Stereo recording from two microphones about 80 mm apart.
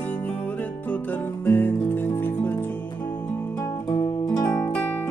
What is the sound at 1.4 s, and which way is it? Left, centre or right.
Guitar, left.